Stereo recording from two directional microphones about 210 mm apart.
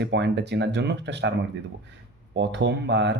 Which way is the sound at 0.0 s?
55° right (ahead or behind).